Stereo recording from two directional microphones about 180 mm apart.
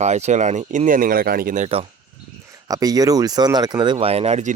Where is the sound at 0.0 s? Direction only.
40° right (ahead or behind); by 1.6 s 55° right (ahead or behind).